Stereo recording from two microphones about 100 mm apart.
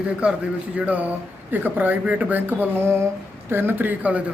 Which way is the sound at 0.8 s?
15° right (ahead or behind).